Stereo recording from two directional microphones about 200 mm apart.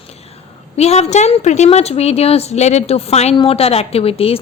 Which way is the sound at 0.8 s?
30° left (ahead or behind).